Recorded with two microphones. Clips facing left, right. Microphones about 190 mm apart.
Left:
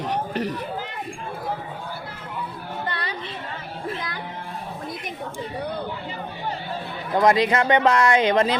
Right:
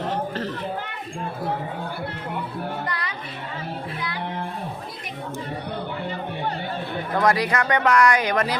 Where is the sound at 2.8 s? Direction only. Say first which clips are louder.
Even; 30° left (ahead or behind).